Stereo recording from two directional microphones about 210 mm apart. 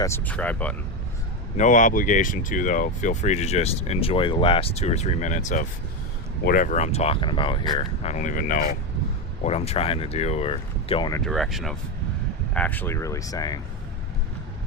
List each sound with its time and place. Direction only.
0.0 s speech: 10° left (ahead or behind)
1.5 s speech: 35° left (ahead or behind)
11.2 s speech: centre (ahead or behind); by 13.6 s 15° left (ahead or behind)